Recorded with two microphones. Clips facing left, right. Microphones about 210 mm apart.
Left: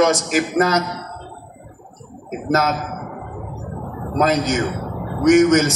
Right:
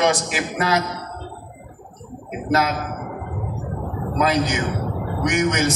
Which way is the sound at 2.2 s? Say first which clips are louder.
Left 2 dB; 45° left (ahead or behind).